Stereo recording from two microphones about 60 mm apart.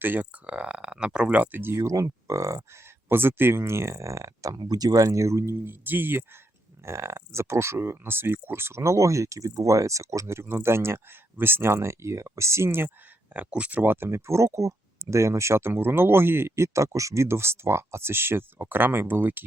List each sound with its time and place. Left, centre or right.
0.0 s speech: right
1.6 s speech: right
3.1 s speech: right
5.6 s speech: right
6.8 s speech: right
13.3 s speech: right
16.6 s speech: right